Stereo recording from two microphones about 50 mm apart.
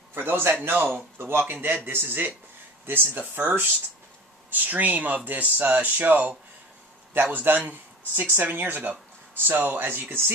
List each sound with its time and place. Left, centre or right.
0.2 s speech: right
7.3 s speech: right